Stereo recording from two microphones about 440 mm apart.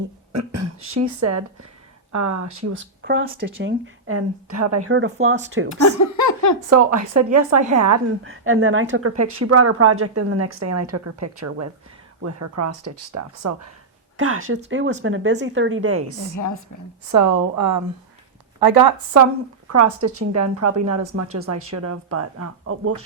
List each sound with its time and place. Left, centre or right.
0.3 s a woman's voice: right
2.6 s speech: right
5.8 s laughter: left
6.7 s a woman's voice: right
8.2 s a woman's voice: right
16.3 s a woman's voice: left
17.1 s a woman's voice: right
19.1 s a woman's voice: right